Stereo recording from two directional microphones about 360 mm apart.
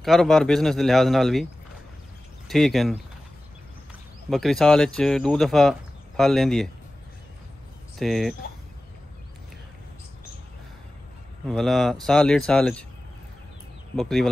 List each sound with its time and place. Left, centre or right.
0.0 s speech: centre
4.3 s speech: centre
8.0 s speech: centre
11.4 s speech: centre
13.9 s speech: centre